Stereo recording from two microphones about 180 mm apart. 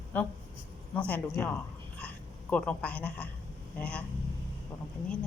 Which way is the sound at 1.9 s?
5° left (ahead or behind).